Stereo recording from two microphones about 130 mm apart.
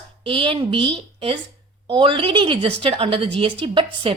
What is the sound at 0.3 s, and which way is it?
A woman's voice, 40° right (ahead or behind).